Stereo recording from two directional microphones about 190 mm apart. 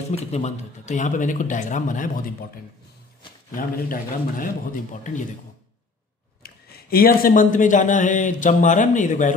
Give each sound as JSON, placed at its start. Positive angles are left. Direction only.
{"t": 0.1, "sound": "speech", "side_deg": 35}
{"t": 3.5, "sound": "a man's voice", "side_deg": 50}
{"t": 6.4, "sound": "speech", "side_deg": 55}